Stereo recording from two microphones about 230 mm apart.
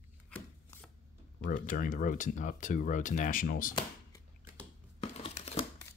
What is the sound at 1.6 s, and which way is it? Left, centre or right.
Speech, left.